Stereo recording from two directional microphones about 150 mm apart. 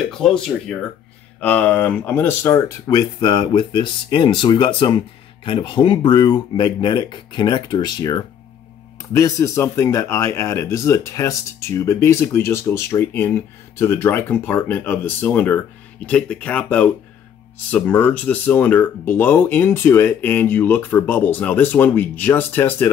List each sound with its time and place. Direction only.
0.1 s speech: 5° left (ahead or behind)